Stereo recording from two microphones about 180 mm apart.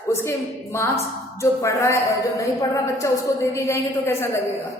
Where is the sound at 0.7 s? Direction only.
15° left (ahead or behind).